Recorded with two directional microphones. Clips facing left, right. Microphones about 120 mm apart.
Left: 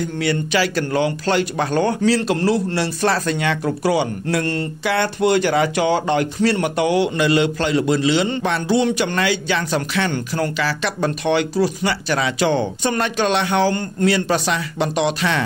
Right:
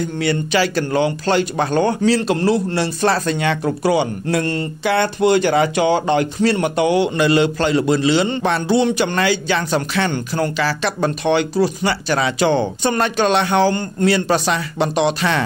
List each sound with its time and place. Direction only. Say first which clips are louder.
0.2 s a man's voice: right 2 dB; 30° right (ahead or behind)
7.2 s a man's voice: right 2 dB; 35° right (ahead or behind)